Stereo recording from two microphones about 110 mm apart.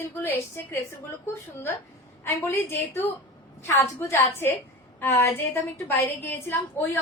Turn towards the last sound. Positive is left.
turn(degrees=20)  # may be behind; listen again after turning